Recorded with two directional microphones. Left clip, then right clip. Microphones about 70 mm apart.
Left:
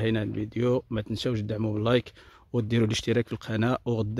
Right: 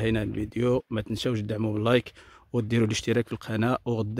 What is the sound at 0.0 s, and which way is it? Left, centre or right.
Speech, centre.